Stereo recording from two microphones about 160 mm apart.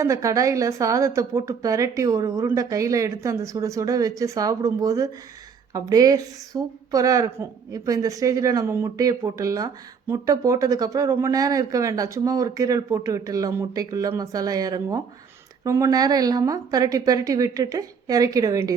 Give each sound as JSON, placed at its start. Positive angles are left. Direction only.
{"t": 0.0, "sound": "a woman's voice", "side_deg": -20}